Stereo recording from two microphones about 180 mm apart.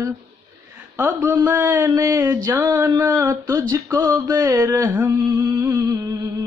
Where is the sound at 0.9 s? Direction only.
15° right (ahead or behind).